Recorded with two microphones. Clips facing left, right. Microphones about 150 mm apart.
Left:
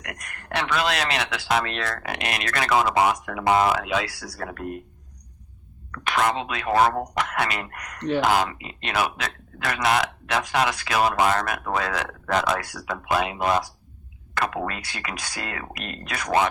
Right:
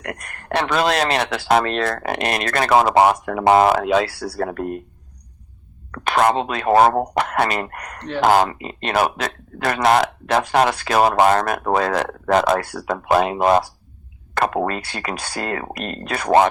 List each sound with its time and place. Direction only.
0.0 s a man's voice: 30° right (ahead or behind)
4.4 s a man's voice: 40° right (ahead or behind)
5.9 s a man's voice: 40° right (ahead or behind)
12.8 s a man's voice: 40° right (ahead or behind)